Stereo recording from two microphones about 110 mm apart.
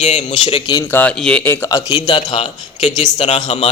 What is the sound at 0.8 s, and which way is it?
Speech, 15° left (ahead or behind).